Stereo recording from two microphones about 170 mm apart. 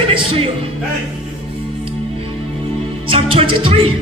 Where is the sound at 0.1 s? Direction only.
35° right (ahead or behind).